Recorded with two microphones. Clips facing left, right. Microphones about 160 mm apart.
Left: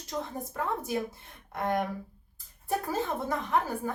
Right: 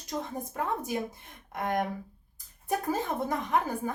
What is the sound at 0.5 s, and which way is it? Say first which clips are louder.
Speech: even; 20° right (ahead or behind).